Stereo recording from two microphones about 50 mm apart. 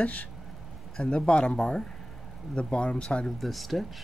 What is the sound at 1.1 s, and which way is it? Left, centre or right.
Speech, centre.